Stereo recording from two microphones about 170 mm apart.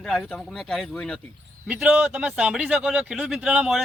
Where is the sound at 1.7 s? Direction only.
5° right (ahead or behind).